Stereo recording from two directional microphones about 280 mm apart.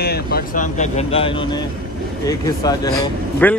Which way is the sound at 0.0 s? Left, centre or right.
Left.